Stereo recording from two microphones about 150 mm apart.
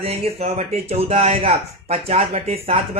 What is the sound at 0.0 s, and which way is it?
Speech, 45° right (ahead or behind).